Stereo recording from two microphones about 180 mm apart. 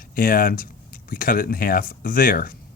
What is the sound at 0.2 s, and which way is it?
Speech, 50° left (ahead or behind).